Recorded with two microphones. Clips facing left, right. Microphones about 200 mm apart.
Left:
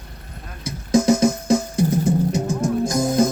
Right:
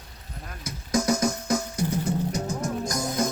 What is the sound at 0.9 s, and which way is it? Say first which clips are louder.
Music: left 8 dB; 25° left (ahead or behind).